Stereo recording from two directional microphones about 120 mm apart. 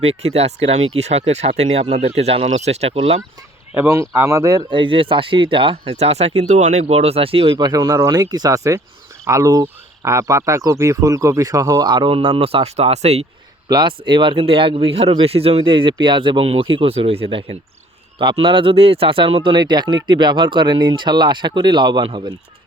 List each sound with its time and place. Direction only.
0.0 s speech: 60° right (ahead or behind)
3.8 s speech: 20° right (ahead or behind)
4.7 s speech: 45° right (ahead or behind)
7.5 s speech: 35° right (ahead or behind)
11.9 s speech: 45° right (ahead or behind); by 13.2 s 65° right (ahead or behind)
13.7 s speech: 35° right (ahead or behind)